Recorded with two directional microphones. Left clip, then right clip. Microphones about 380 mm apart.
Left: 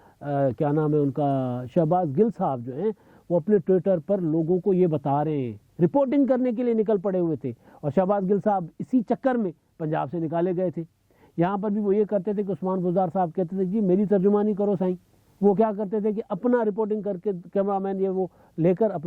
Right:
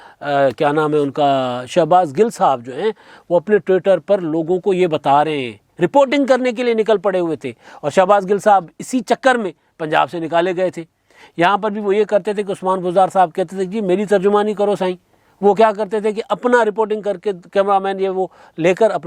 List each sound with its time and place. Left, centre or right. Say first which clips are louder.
0.2 s speech: right 10 dB; centre
4.4 s speech: right 6 dB; centre
4.7 s speech: right 11 dB; centre